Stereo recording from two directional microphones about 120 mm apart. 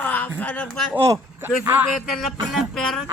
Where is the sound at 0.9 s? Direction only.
20° right (ahead or behind).